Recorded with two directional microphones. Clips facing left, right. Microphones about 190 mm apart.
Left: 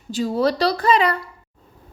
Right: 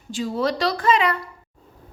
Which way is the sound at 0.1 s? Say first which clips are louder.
Left 3 dB; 40° left (ahead or behind).